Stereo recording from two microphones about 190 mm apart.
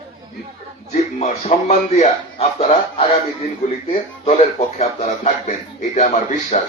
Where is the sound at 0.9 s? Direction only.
35° left (ahead or behind).